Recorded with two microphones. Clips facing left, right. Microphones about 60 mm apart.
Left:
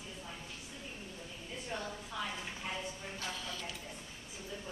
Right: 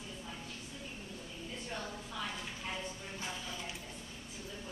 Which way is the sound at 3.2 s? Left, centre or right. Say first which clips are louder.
Even; centre.